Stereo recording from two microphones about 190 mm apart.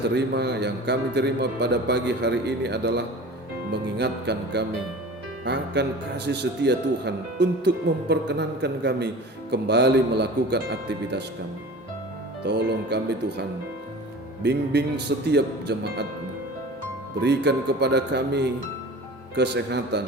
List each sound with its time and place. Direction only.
0.1 s a man's voice: 60° right (ahead or behind)
12.5 s a man's voice: 60° right (ahead or behind)
14.4 s a man's voice: 65° right (ahead or behind)
17.2 s a man's voice: 65° right (ahead or behind)